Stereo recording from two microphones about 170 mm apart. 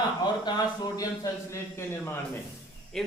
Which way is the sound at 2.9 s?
Centre (ahead or behind).